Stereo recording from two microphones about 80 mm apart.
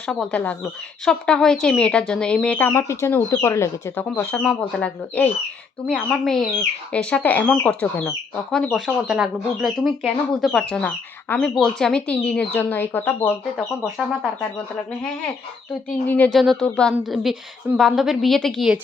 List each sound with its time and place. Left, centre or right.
0.1 s speech: centre
0.3 s speech: centre
1.0 s speech: centre
2.7 s speech: left
4.3 s speech: centre
5.9 s speech: centre
6.9 s speech: centre
8.7 s speech: centre
10.7 s speech: centre
12.5 s speech: left
13.8 s speech: centre
16.0 s speech: left
16.3 s speech: centre
17.0 s speech: centre